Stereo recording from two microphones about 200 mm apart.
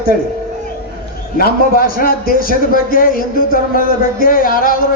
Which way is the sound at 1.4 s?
45° left (ahead or behind).